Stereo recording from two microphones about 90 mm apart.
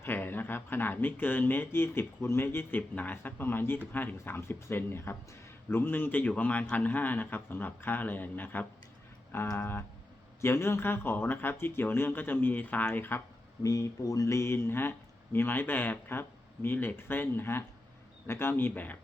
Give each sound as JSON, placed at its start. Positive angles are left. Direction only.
{"t": 0.0, "sound": "speech", "side_deg": 20}
{"t": 13.6, "sound": "speech", "side_deg": 40}